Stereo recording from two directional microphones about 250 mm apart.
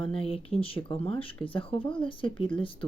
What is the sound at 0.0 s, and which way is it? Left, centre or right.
Speech, left.